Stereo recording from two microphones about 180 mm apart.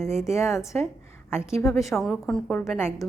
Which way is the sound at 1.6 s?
Centre (ahead or behind).